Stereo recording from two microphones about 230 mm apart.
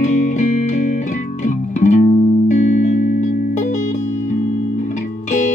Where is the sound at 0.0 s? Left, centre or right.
Left.